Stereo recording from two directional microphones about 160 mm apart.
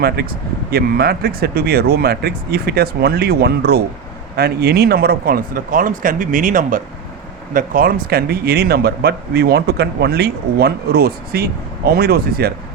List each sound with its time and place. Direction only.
0.2 s speech: 75° right (ahead or behind)